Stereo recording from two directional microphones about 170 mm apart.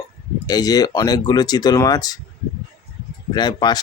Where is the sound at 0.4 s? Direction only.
20° left (ahead or behind).